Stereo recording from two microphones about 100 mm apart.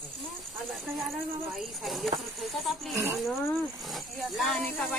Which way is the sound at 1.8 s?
Centre (ahead or behind).